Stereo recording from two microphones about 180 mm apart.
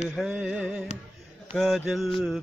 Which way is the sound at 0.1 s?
5° right (ahead or behind).